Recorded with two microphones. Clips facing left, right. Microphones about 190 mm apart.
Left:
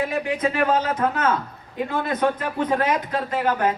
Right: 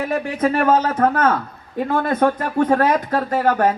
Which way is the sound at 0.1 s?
45° right (ahead or behind).